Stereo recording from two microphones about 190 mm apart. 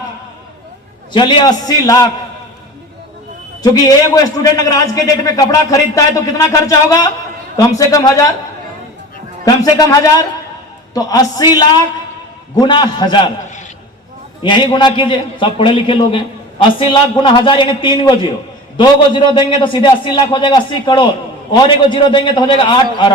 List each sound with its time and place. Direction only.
1.1 s a man's voice: 25° left (ahead or behind)
3.6 s a man's voice: 20° left (ahead or behind)
9.4 s a man's voice: 20° left (ahead or behind)
14.4 s a man's voice: 25° left (ahead or behind)